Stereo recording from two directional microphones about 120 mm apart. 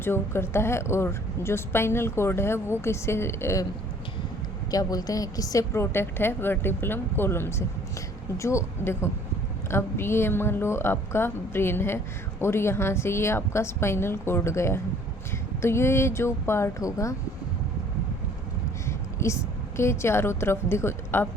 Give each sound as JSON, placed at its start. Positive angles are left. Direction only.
{"t": 0.0, "sound": "speech", "side_deg": 20}
{"t": 4.7, "sound": "speech", "side_deg": 30}
{"t": 18.9, "sound": "a woman's voice", "side_deg": 25}